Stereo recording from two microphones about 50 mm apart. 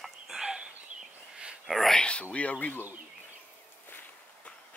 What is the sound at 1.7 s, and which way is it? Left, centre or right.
Speech, centre.